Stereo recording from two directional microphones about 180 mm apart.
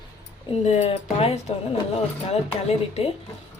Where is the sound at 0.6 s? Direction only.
35° left (ahead or behind).